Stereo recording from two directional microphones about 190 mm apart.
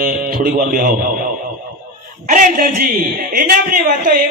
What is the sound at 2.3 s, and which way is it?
A man's voice, 50° right (ahead or behind).